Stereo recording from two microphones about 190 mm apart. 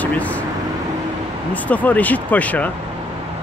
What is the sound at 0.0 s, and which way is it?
Vehicle, 10° left (ahead or behind).